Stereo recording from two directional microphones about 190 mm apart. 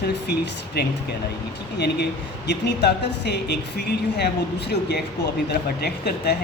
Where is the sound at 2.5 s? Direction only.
65° left (ahead or behind).